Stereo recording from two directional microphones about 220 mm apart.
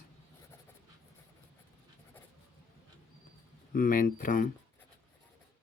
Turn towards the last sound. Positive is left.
turn(degrees=35)  # may be behind; listen again after turning